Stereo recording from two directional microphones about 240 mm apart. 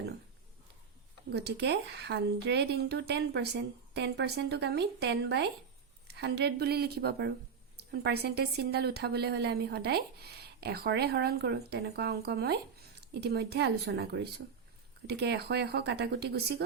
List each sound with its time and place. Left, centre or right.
1.3 s a woman's voice: right